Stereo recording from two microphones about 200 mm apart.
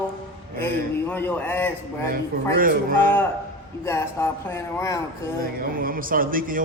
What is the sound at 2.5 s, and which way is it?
Speech, 45° right (ahead or behind).